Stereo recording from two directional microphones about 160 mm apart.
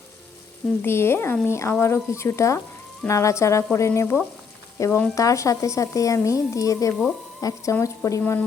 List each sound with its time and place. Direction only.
0.8 s frying: 15° left (ahead or behind)
4.8 s speech: 10° left (ahead or behind)